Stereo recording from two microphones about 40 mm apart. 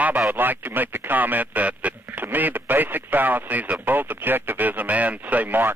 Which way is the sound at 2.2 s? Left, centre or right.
Right.